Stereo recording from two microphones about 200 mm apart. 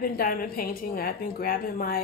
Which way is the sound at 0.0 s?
45° left (ahead or behind).